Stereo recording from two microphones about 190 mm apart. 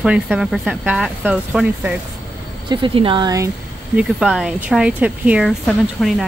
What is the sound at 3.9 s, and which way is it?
Speech, 5° right (ahead or behind).